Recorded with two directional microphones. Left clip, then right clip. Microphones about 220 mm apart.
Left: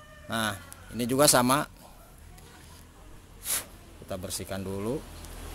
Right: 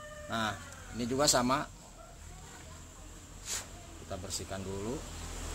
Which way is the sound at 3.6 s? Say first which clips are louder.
Left 4 dB; 50° left (ahead or behind).